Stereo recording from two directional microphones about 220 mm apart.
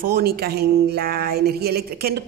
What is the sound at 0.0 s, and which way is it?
Speech, 45° right (ahead or behind).